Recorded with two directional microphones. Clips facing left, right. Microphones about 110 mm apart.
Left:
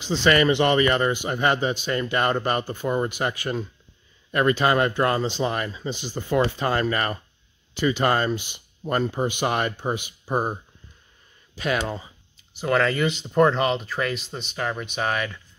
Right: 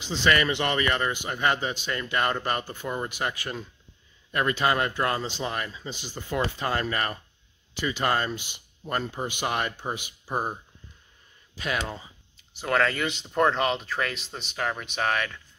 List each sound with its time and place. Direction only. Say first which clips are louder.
0.0 s speech: left 5 dB; 30° left (ahead or behind)
2.6 s speech: left 7 dB; 45° left (ahead or behind)
4.3 s speech: left 4 dB; 45° left (ahead or behind)
6.1 s speech: left 6 dB; 45° left (ahead or behind)
11.5 s speech: left 5 dB; 55° left (ahead or behind)
12.5 s speech: left 3 dB; centre (ahead or behind)